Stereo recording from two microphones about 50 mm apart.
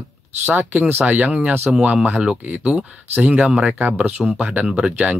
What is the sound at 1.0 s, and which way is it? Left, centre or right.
Speech, right.